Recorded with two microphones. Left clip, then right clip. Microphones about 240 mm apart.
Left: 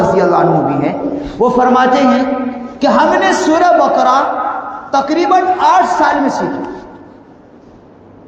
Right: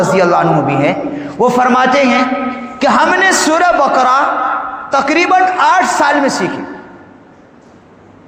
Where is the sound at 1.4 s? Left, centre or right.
Right.